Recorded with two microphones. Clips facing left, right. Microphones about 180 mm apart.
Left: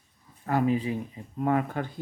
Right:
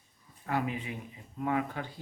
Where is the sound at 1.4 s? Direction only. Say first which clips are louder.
Left 5 dB; 45° left (ahead or behind).